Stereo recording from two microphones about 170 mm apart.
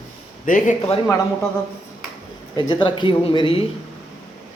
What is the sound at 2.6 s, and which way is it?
Speech, 30° left (ahead or behind).